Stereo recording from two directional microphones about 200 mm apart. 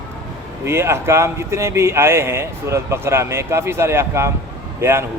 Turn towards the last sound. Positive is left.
turn(degrees=-15)  # may be behind; listen again after turning